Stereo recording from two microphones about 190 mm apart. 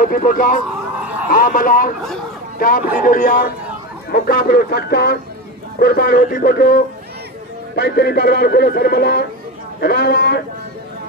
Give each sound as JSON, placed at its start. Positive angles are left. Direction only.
{"t": 0.0, "sound": "a man's voice", "side_deg": 45}